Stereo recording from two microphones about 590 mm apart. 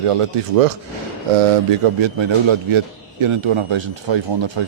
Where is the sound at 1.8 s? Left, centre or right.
Right.